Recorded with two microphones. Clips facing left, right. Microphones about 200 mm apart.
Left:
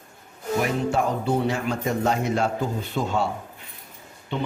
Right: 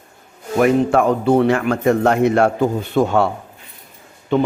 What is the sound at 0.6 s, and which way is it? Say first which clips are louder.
Speech: right 11 dB; 55° right (ahead or behind).